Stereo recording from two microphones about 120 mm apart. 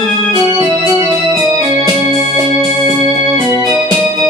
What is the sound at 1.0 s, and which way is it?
Organ, 35° right (ahead or behind).